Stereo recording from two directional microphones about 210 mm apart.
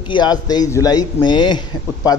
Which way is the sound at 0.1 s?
20° left (ahead or behind).